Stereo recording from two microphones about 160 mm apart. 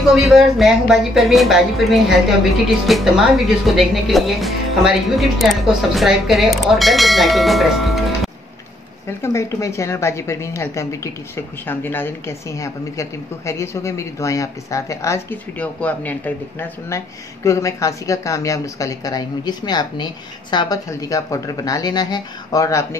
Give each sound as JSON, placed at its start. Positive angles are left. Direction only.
{"t": 0.1, "sound": "speech", "side_deg": 0}
{"t": 9.2, "sound": "a woman's voice", "side_deg": 20}